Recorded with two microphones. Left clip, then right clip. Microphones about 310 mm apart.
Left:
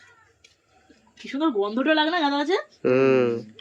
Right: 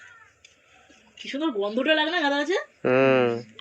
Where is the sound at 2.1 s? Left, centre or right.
Left.